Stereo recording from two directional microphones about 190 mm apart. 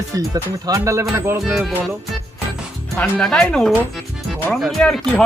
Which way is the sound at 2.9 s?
5° left (ahead or behind).